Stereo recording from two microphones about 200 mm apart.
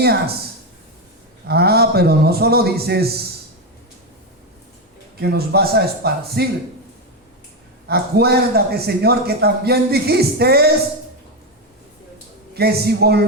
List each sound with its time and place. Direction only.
1.5 s a man's voice: 50° right (ahead or behind)
5.2 s a man's voice: 55° right (ahead or behind)
7.9 s a man's voice: 55° right (ahead or behind)
12.5 s a man's voice: 50° right (ahead or behind)